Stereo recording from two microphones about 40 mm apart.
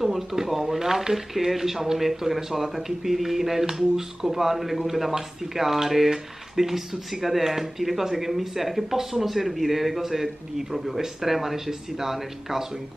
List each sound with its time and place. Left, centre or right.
0.0 s speech: centre